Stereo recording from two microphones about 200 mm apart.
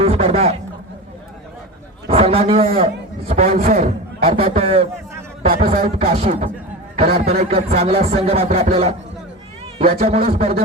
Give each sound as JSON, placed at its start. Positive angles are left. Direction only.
{"t": 0.0, "sound": "speech", "side_deg": -30}
{"t": 2.0, "sound": "a man's voice", "side_deg": -30}
{"t": 4.3, "sound": "a man's voice", "side_deg": -30}